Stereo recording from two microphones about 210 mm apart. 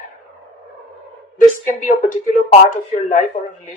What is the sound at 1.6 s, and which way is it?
Speech, 35° left (ahead or behind).